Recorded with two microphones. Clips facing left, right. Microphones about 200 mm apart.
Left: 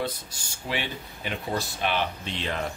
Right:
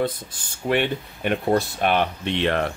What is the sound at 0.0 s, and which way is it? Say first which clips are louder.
Speech: right 6 dB; 55° right (ahead or behind).